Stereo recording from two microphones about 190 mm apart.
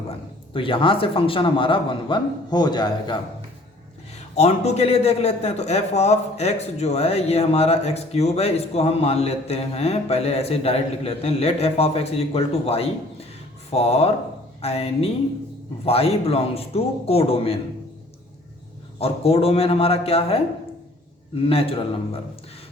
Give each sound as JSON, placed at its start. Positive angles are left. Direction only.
{"t": 0.5, "sound": "a man's voice", "side_deg": 25}
{"t": 4.4, "sound": "a man's voice", "side_deg": 35}
{"t": 18.9, "sound": "a man's voice", "side_deg": 30}